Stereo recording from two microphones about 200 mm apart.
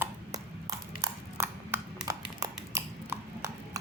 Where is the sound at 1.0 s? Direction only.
15° right (ahead or behind).